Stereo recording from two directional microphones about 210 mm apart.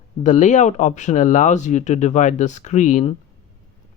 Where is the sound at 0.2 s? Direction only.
35° left (ahead or behind).